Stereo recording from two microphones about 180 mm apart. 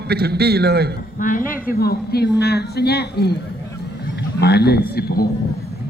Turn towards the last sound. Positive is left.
turn(degrees=60)  # may be behind; listen again after turning